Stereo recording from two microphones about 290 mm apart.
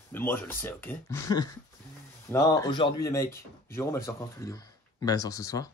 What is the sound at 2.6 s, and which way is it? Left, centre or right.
Speech, centre.